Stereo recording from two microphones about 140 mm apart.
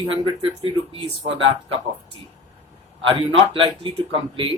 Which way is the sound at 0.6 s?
45° right (ahead or behind).